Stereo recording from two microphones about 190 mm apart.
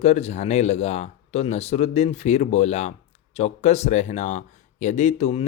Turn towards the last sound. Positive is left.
turn(degrees=35)  # may be behind; listen again after turning